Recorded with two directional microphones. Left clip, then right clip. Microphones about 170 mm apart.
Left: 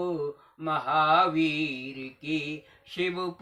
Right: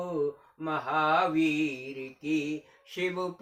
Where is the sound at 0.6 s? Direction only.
20° right (ahead or behind).